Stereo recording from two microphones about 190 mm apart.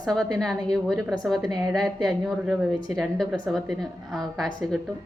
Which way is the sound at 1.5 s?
20° right (ahead or behind).